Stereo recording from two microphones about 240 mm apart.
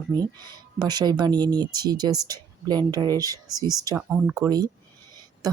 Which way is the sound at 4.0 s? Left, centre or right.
Centre.